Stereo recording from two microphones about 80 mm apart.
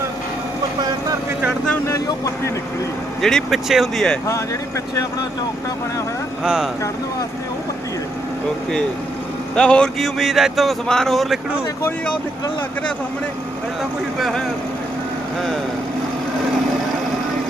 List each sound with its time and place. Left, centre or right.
1.9 s speech: left
3.2 s speech: centre
6.4 s speech: centre
9.6 s speech: centre
10.0 s speech: centre
14.2 s speech: centre